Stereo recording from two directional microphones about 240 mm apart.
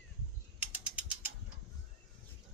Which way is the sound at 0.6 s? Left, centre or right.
Centre.